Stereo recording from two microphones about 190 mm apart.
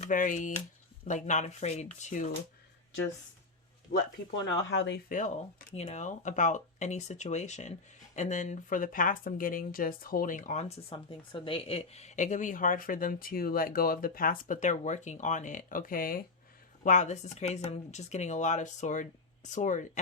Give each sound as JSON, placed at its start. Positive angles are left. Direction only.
{"t": 0.0, "sound": "speech", "side_deg": 45}
{"t": 3.9, "sound": "speech", "side_deg": 45}
{"t": 4.5, "sound": "speech", "side_deg": 75}
{"t": 5.0, "sound": "speech", "side_deg": 45}